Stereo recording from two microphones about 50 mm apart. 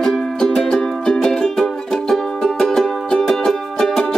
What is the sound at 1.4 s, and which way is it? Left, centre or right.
Music, centre.